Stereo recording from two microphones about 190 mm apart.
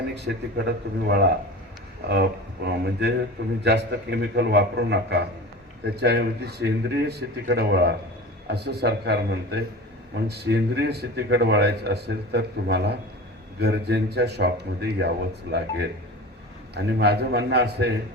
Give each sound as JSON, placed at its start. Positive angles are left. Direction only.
{"t": 0.5, "sound": "a man's voice", "side_deg": -60}